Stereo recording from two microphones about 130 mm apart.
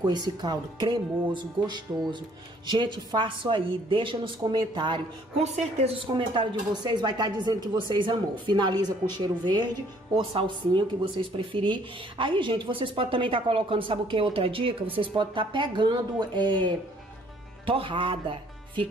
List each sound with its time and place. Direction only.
0.0 s speech: 35° right (ahead or behind)
5.4 s a woman's voice: 55° right (ahead or behind)
6.1 s speech: 35° right (ahead or behind)